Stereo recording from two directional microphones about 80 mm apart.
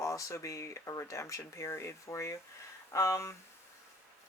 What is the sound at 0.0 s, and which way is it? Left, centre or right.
Speech, left.